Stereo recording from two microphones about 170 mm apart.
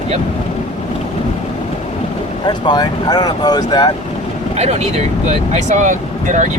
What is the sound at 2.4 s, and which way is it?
Speech, 25° left (ahead or behind).